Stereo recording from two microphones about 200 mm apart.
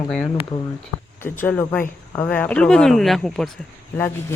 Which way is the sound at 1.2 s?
10° left (ahead or behind).